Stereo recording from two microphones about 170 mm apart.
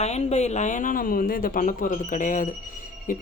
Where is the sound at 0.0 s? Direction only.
40° left (ahead or behind).